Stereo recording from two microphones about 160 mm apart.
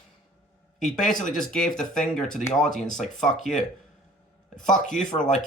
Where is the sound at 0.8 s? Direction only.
Centre (ahead or behind).